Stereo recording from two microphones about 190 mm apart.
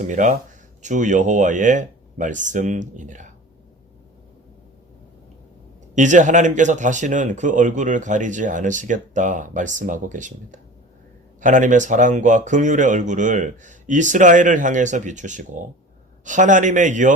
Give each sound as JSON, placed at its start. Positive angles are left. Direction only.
{"t": 0.0, "sound": "speech", "side_deg": -40}
{"t": 5.9, "sound": "speech", "side_deg": -40}